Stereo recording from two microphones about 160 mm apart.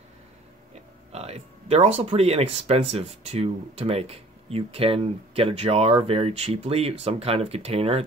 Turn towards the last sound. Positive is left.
turn(degrees=-40)  # may be behind; listen again after turning